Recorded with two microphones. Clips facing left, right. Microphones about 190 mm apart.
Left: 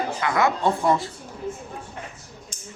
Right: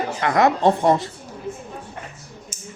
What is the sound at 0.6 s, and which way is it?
Speech, 40° right (ahead or behind).